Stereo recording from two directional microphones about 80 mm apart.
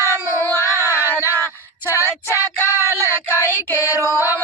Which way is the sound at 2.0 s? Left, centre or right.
Left.